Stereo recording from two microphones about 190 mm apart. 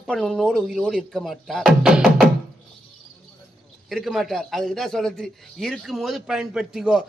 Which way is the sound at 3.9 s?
Centre (ahead or behind).